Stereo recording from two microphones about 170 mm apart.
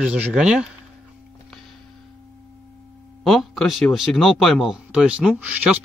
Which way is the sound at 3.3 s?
Centre (ahead or behind).